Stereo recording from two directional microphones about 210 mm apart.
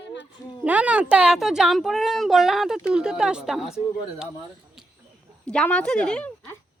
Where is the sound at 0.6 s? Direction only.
5° right (ahead or behind).